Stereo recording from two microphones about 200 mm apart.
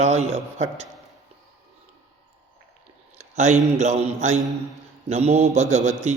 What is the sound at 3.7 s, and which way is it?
A man's voice, 35° right (ahead or behind).